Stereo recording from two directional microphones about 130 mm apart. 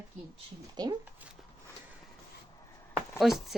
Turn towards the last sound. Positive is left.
turn(degrees=0)  # may be behind; listen again after turning